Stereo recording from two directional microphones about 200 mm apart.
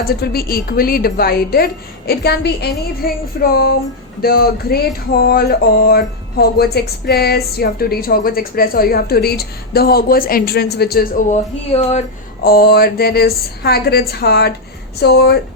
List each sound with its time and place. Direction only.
0.0 s speech: 50° left (ahead or behind)
11.7 s speech: 30° left (ahead or behind)
12.4 s speech: 50° left (ahead or behind)